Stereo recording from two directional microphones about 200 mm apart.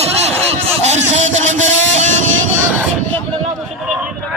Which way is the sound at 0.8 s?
35° right (ahead or behind).